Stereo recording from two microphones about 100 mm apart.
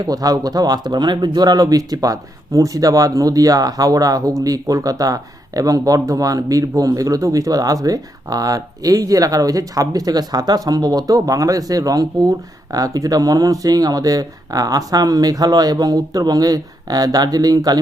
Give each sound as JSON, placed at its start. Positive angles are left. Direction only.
{"t": 0.0, "sound": "speech", "side_deg": -40}